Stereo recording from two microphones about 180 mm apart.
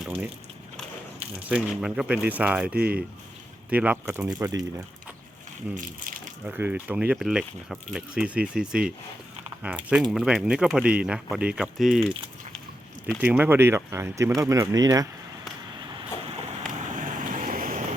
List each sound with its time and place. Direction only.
1.5 s speech: 5° right (ahead or behind)
2.7 s speech: 55° right (ahead or behind)
3.7 s speech: 10° right (ahead or behind)
4.4 s speech: 15° right (ahead or behind)
5.7 s speech: 50° right (ahead or behind)
6.4 s speech: 10° right (ahead or behind)
13.2 s speech: 10° right (ahead or behind)
16.8 s vehicle: 45° right (ahead or behind)